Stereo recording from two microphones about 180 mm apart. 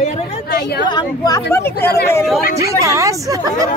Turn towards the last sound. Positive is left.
turn(degrees=-20)  # may be behind; listen again after turning